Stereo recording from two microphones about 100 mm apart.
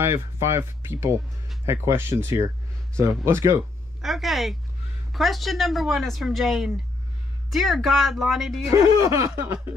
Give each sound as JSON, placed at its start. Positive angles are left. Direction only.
{"t": 0.0, "sound": "speech", "side_deg": -25}
{"t": 4.0, "sound": "speech", "side_deg": 0}
{"t": 8.8, "sound": "speech", "side_deg": -35}